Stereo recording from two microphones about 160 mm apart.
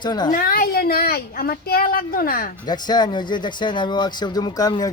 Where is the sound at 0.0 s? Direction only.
25° left (ahead or behind).